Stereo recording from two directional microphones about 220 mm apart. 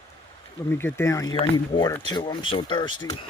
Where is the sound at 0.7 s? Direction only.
10° left (ahead or behind).